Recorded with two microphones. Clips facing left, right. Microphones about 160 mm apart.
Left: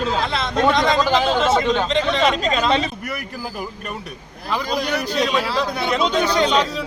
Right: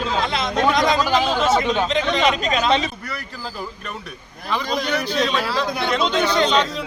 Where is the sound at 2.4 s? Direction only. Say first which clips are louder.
Left 1 dB; 30° left (ahead or behind).